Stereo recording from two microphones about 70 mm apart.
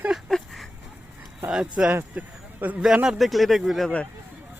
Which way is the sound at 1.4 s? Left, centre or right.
Centre.